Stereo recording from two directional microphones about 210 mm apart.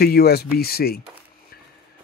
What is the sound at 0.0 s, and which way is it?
Speech, 50° left (ahead or behind).